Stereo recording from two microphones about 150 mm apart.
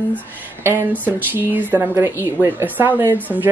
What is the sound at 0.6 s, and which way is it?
Speech, 15° right (ahead or behind).